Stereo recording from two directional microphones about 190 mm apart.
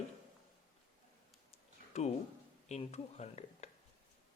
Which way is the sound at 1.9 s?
35° left (ahead or behind).